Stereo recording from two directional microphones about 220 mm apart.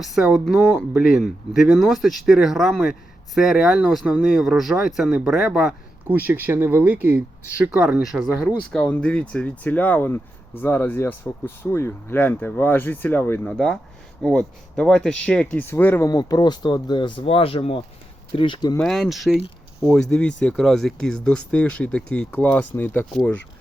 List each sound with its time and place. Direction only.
0.0 s speech: centre (ahead or behind); by 18.8 s 20° left (ahead or behind)
18.8 s speech: centre (ahead or behind)